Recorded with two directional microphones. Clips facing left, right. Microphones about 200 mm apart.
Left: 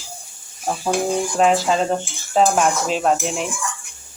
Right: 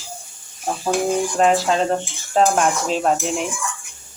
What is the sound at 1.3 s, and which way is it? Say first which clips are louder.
Speech: left 1 dB; centre (ahead or behind).